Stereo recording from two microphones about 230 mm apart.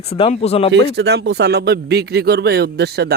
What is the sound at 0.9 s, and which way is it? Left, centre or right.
Speech, right.